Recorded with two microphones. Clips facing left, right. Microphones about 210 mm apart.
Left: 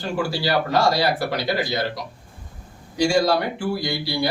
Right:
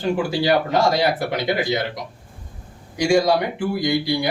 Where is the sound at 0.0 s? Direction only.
20° right (ahead or behind).